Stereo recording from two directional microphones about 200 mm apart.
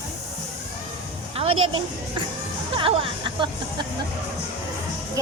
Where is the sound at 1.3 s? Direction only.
30° right (ahead or behind).